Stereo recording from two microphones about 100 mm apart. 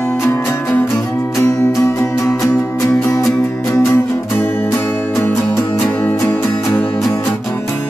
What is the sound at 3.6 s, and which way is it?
Music, 30° left (ahead or behind).